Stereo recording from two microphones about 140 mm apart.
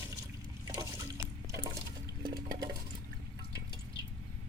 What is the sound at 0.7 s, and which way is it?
Boat, 25° right (ahead or behind).